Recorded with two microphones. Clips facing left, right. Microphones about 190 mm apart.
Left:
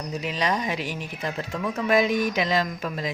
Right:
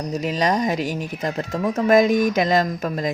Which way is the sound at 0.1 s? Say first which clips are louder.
Right 5 dB; 40° right (ahead or behind).